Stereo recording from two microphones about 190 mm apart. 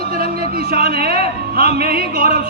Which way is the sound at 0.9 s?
55° right (ahead or behind).